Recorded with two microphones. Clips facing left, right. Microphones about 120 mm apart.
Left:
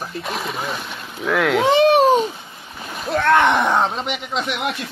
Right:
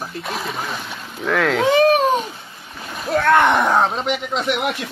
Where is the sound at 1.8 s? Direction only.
30° left (ahead or behind).